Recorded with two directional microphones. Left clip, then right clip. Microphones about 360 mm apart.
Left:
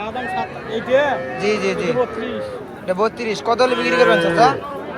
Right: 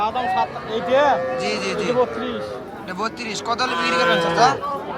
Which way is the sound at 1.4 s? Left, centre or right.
Centre.